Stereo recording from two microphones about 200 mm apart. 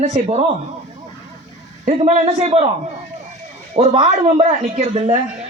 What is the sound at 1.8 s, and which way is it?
Speech, 35° right (ahead or behind).